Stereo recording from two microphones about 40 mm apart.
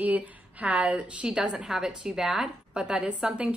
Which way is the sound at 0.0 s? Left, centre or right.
Right.